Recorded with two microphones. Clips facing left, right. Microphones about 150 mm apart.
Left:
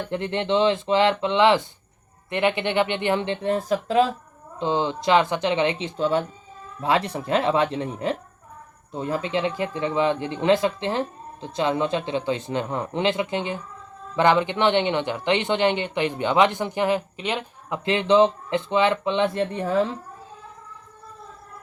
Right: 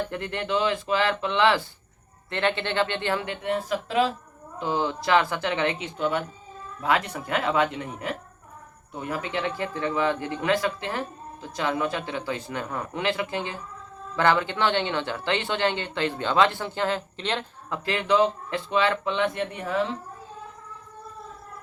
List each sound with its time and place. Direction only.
0.1 s speech: 20° left (ahead or behind); by 4.0 s 40° left (ahead or behind)
4.6 s speech: 20° left (ahead or behind)
6.0 s speech: 30° left (ahead or behind)